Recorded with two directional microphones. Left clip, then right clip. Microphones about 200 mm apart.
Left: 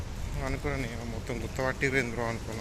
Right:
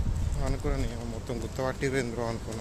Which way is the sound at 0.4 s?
15° right (ahead or behind).